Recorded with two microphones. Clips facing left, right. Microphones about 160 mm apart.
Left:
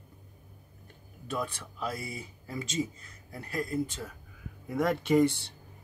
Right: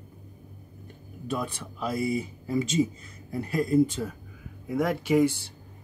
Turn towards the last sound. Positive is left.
turn(degrees=-5)  # may be behind; listen again after turning